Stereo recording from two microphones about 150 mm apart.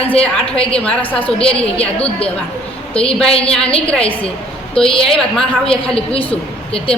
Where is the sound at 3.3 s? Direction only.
40° left (ahead or behind).